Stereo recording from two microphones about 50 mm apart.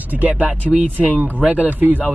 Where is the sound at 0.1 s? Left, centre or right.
Right.